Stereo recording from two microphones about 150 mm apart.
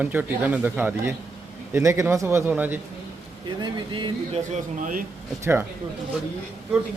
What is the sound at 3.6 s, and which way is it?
Speech, 30° right (ahead or behind).